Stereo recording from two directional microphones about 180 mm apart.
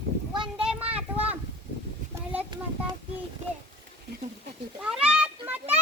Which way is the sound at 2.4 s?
25° right (ahead or behind).